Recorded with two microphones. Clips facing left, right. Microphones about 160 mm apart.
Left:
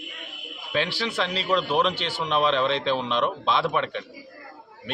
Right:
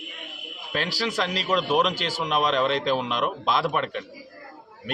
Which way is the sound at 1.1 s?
10° right (ahead or behind).